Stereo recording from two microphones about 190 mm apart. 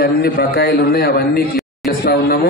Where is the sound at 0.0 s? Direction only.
55° left (ahead or behind).